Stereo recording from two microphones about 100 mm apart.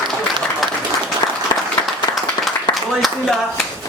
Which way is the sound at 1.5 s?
35° left (ahead or behind).